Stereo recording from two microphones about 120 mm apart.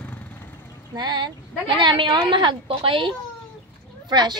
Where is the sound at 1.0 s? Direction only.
35° right (ahead or behind).